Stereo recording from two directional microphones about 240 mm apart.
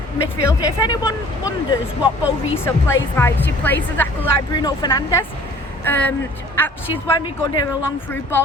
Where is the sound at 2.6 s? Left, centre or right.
Centre.